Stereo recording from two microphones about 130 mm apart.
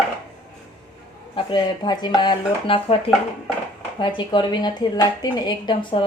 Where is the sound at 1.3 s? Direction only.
35° left (ahead or behind).